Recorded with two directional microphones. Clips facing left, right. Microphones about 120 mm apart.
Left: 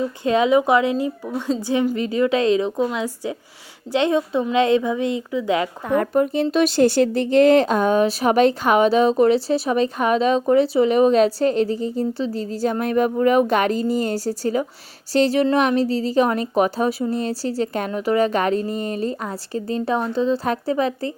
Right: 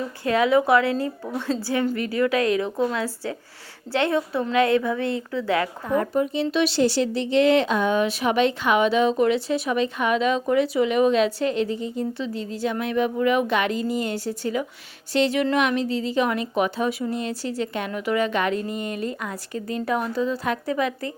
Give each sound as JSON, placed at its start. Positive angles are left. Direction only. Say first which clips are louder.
{"t": 0.3, "sound": "a woman's voice", "louder": "left 2 dB", "side_deg": 20}
{"t": 5.9, "sound": "a woman's voice", "louder": "left 4 dB", "side_deg": 60}